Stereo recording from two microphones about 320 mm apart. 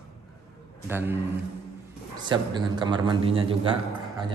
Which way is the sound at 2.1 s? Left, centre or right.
Centre.